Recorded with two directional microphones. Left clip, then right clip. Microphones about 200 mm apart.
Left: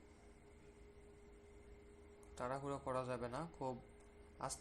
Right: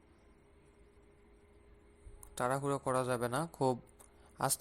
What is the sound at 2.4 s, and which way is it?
Speech, 35° right (ahead or behind).